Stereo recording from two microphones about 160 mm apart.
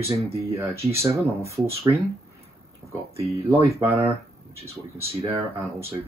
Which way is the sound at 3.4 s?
20° right (ahead or behind).